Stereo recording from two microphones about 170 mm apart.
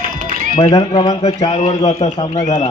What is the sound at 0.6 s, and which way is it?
Speech, 35° left (ahead or behind).